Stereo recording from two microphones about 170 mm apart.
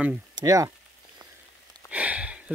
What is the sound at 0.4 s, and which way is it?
Speech, 20° right (ahead or behind).